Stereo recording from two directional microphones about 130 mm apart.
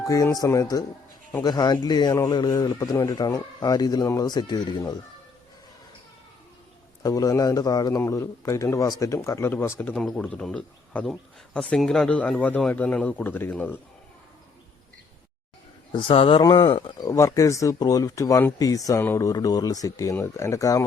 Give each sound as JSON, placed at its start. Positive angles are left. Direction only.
{"t": 0.0, "sound": "a man's voice", "side_deg": 25}
{"t": 7.0, "sound": "a man's voice", "side_deg": 25}
{"t": 9.9, "sound": "a man's voice", "side_deg": 5}
{"t": 15.9, "sound": "a man's voice", "side_deg": 45}
{"t": 17.1, "sound": "a man's voice", "side_deg": 25}